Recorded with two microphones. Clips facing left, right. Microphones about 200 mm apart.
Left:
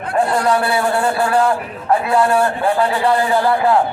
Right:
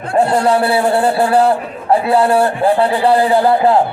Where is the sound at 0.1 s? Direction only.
30° right (ahead or behind).